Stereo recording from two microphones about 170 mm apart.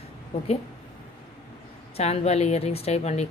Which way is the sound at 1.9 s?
40° left (ahead or behind).